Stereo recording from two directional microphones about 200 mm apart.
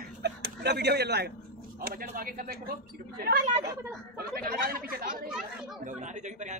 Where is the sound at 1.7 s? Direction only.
50° right (ahead or behind).